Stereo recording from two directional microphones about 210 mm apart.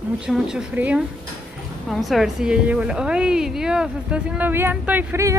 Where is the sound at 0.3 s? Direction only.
5° right (ahead or behind).